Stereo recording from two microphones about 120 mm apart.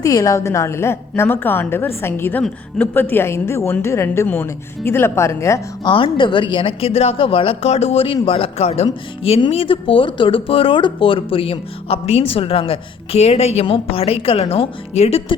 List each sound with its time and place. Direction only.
0.0 s a woman's voice: 30° left (ahead or behind)
5.8 s a woman's voice: 45° left (ahead or behind)